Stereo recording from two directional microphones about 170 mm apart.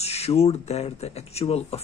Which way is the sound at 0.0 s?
40° left (ahead or behind).